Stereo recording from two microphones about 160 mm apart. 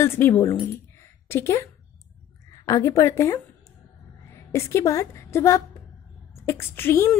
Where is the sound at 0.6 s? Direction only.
15° left (ahead or behind).